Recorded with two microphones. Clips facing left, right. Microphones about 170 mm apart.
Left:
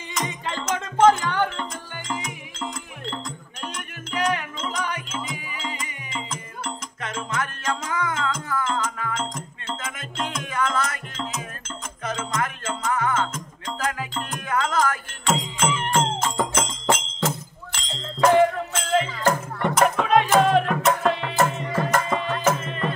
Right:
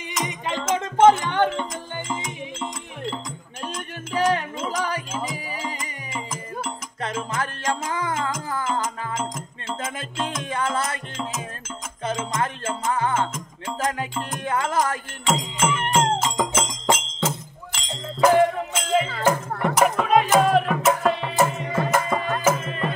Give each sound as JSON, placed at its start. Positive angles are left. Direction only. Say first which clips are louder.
{"t": 0.1, "sound": "music", "louder": "right 1 dB", "side_deg": -15}
{"t": 3.6, "sound": "music", "louder": "right 2 dB", "side_deg": -30}
{"t": 6.1, "sound": "music", "louder": "right 2 dB", "side_deg": -5}
{"t": 7.3, "sound": "music", "louder": "left 1 dB", "side_deg": -30}
{"t": 9.1, "sound": "music", "louder": "right 1 dB", "side_deg": -5}
{"t": 10.2, "sound": "music", "louder": "even", "side_deg": -30}
{"t": 12.4, "sound": "music", "louder": "right 1 dB", "side_deg": -30}
{"t": 14.3, "sound": "music", "louder": "even", "side_deg": -25}
{"t": 15.2, "sound": "music", "louder": "right 1 dB", "side_deg": -5}
{"t": 16.5, "sound": "music", "louder": "right 1 dB", "side_deg": 0}